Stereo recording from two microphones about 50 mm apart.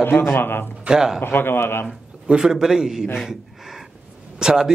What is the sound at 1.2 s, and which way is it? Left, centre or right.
Speech, left.